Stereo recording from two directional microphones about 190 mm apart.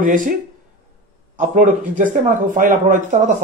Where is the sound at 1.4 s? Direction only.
40° right (ahead or behind).